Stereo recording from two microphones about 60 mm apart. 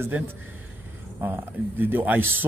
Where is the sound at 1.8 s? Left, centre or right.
Right.